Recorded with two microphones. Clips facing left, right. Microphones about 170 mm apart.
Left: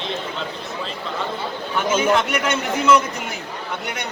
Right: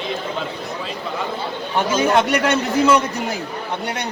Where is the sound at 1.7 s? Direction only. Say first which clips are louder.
Right 2 dB; 35° right (ahead or behind).